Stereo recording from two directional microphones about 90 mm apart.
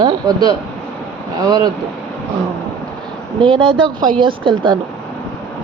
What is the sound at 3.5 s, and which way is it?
Speech, 75° right (ahead or behind).